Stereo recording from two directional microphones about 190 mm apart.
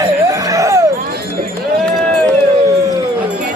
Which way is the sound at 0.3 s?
15° right (ahead or behind).